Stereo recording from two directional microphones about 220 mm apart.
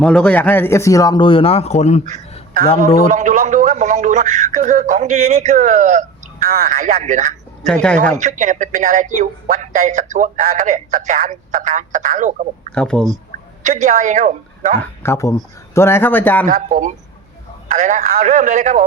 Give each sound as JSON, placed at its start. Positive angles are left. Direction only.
{"t": 0.0, "sound": "speech", "side_deg": 5}
{"t": 3.1, "sound": "speech", "side_deg": -35}
{"t": 7.7, "sound": "speech", "side_deg": 5}
{"t": 8.1, "sound": "speech", "side_deg": -35}
{"t": 12.7, "sound": "speech", "side_deg": 5}
{"t": 13.6, "sound": "a woman's voice", "side_deg": -35}
{"t": 14.8, "sound": "speech", "side_deg": 10}
{"t": 16.5, "sound": "a man's voice", "side_deg": -35}